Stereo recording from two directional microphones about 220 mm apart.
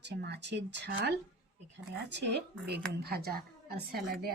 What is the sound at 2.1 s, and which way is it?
Speech, 50° right (ahead or behind).